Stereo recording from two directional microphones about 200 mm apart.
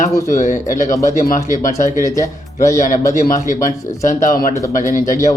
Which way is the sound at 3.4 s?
40° left (ahead or behind).